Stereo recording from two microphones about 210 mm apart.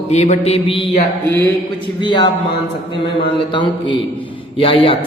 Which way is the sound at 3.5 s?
25° left (ahead or behind).